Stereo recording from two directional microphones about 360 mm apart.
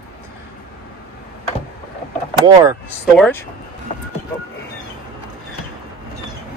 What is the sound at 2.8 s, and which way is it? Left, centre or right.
Speech, centre.